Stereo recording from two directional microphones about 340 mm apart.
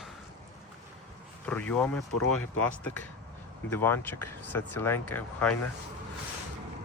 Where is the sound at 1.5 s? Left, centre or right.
Centre.